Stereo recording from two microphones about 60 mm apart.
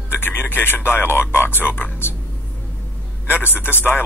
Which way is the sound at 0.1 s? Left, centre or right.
Left.